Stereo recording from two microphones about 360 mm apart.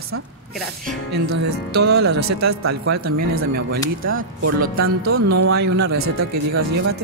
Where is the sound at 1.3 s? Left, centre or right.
Right.